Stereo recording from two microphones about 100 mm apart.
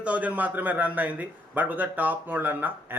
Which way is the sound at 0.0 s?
15° right (ahead or behind).